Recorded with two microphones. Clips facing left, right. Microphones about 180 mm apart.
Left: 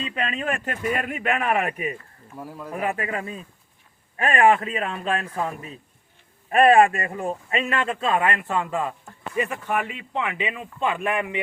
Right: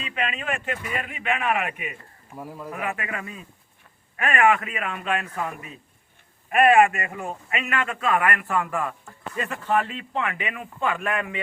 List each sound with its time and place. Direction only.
0.0 s speech: 35° left (ahead or behind)
2.3 s speech: centre (ahead or behind)
2.7 s a man's voice: 30° left (ahead or behind)